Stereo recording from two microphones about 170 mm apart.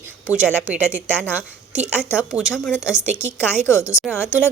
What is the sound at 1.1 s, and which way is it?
Speech, 10° left (ahead or behind).